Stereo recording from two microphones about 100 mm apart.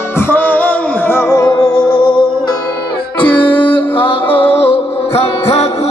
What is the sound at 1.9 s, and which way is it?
Music, 60° left (ahead or behind).